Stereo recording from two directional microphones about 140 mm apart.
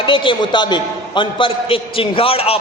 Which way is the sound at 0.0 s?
35° left (ahead or behind).